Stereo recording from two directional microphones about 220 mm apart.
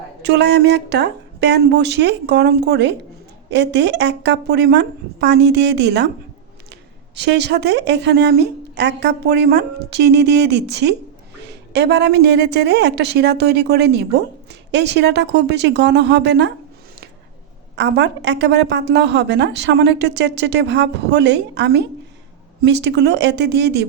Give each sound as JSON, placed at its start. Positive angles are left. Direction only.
{"t": 0.2, "sound": "a woman's voice", "side_deg": -50}
{"t": 7.3, "sound": "a woman's voice", "side_deg": -50}
{"t": 17.7, "sound": "a woman's voice", "side_deg": -50}